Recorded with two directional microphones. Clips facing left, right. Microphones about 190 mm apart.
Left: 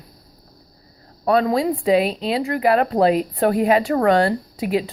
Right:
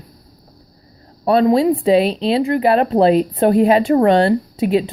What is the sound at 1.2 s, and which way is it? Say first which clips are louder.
Speech: right 5 dB; 25° right (ahead or behind).